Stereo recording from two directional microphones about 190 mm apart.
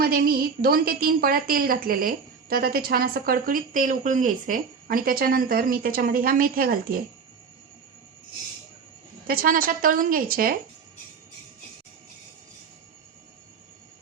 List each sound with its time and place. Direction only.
0.0 s a woman's voice: 50° right (ahead or behind)
9.2 s a woman's voice: 50° right (ahead or behind)